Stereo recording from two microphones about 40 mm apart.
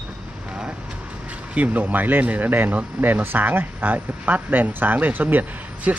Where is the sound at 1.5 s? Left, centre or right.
Right.